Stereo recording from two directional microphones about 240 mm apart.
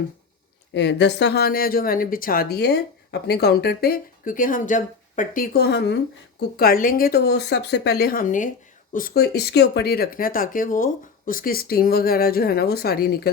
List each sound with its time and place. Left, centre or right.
0.7 s speech: left